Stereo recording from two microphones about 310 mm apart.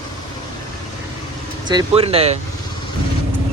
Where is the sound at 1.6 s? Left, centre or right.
Centre.